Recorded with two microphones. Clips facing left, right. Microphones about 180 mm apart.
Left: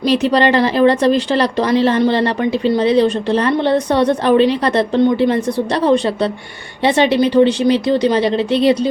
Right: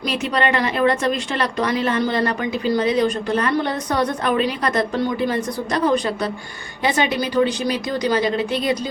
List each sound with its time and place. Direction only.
0.1 s a woman's voice: 35° left (ahead or behind)